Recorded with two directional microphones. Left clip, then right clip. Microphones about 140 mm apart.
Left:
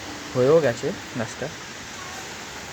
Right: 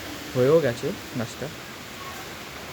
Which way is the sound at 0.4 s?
15° right (ahead or behind).